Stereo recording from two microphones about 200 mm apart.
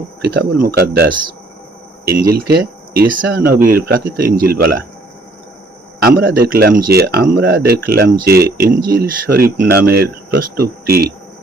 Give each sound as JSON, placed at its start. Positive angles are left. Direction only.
{"t": 0.2, "sound": "speech", "side_deg": -50}
{"t": 2.3, "sound": "speech", "side_deg": -50}
{"t": 6.1, "sound": "speech", "side_deg": -50}